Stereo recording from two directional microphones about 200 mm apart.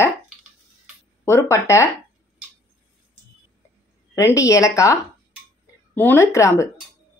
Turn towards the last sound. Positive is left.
turn(degrees=15)  # may be behind; listen again after turning